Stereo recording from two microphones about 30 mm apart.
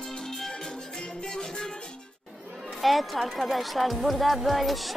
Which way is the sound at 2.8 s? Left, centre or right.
Centre.